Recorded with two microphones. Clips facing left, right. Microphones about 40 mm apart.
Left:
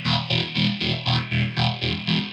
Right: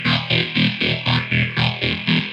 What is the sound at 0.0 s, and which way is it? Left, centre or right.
Music, right.